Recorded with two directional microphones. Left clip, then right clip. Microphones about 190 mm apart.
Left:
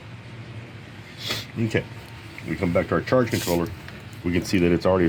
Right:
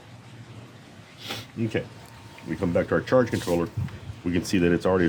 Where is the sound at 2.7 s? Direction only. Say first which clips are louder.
Even; 10° right (ahead or behind).